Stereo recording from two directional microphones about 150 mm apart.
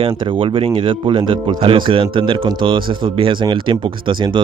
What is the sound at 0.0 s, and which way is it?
Speech, 35° right (ahead or behind).